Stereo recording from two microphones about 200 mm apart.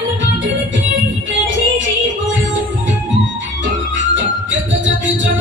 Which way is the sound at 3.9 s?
65° right (ahead or behind).